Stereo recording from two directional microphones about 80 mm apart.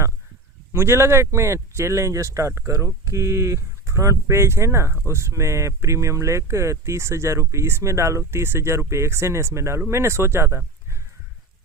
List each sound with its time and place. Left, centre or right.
0.7 s speech: right